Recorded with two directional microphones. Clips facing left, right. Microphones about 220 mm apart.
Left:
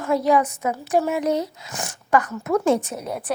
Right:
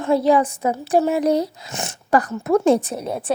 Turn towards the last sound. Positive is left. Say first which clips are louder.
# right 3 dB
turn(degrees=-25)  # may be behind; listen again after turning